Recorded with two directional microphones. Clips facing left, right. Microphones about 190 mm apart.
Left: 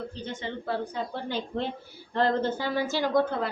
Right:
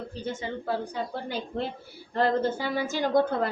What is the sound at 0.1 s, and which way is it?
A woman's voice, 10° right (ahead or behind).